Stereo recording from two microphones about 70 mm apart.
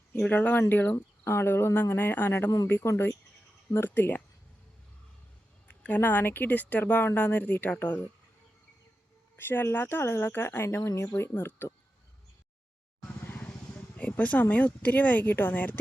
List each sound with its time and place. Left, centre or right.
0.2 s speech: left
2.6 s speech: left
5.6 s speech: left
9.3 s speech: left
13.9 s a sound: left
14.5 s speech: left